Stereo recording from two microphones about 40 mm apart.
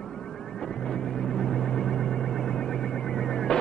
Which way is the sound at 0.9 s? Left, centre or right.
Centre.